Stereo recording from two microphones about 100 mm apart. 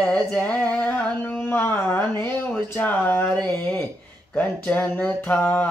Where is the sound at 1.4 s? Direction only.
20° left (ahead or behind).